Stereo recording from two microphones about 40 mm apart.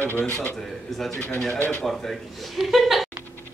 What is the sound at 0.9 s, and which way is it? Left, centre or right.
A man's voice, centre.